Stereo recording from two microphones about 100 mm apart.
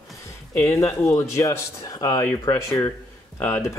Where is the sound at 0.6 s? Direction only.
30° left (ahead or behind).